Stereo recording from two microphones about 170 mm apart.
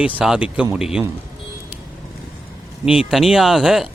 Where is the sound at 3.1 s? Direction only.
Centre (ahead or behind).